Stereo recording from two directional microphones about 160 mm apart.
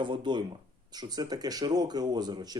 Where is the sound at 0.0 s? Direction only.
30° right (ahead or behind).